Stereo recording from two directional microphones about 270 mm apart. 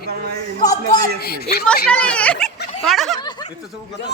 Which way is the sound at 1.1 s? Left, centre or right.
Left.